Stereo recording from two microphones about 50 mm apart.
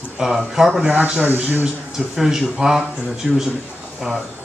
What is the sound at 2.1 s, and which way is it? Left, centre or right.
Speech, centre.